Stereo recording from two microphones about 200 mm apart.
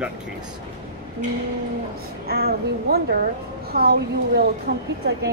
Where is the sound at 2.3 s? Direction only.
50° right (ahead or behind).